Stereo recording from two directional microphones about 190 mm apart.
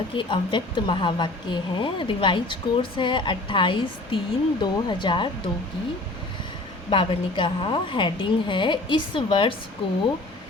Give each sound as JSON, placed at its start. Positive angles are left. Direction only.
{"t": 0.1, "sound": "a woman's voice", "side_deg": 25}
{"t": 6.9, "sound": "a woman's voice", "side_deg": 30}